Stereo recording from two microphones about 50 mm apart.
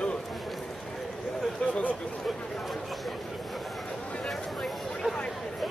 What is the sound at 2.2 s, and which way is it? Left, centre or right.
Speech, centre.